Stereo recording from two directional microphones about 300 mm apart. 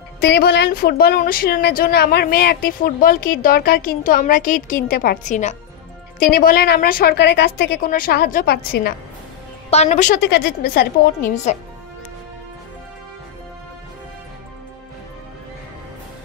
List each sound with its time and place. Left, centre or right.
0.2 s a woman's voice: left
9.7 s speech: left